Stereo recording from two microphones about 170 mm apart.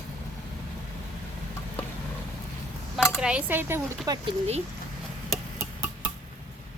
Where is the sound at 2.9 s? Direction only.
Centre (ahead or behind); by 4.2 s 20° right (ahead or behind).